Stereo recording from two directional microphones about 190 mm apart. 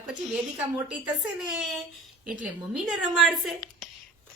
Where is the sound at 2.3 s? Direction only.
Centre (ahead or behind).